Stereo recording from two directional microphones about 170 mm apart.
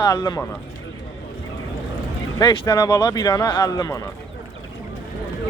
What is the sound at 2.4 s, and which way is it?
Speech, 25° left (ahead or behind).